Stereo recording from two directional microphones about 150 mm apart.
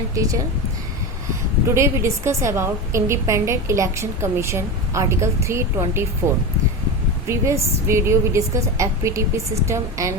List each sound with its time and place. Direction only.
0.1 s a woman's voice: 20° right (ahead or behind)
1.6 s a woman's voice: 20° right (ahead or behind)
7.3 s a woman's voice: 20° right (ahead or behind)